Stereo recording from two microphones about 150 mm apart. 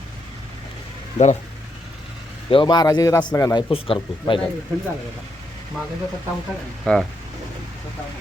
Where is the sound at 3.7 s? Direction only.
35° left (ahead or behind).